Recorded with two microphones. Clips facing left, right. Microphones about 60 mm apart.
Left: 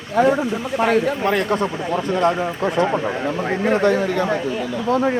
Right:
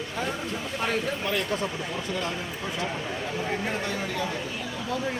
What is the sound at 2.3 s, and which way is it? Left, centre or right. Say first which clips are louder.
Speech: left 12 dB; left.